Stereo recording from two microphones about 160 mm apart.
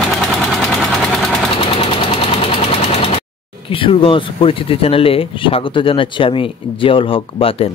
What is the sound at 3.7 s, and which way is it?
Speech, 35° left (ahead or behind).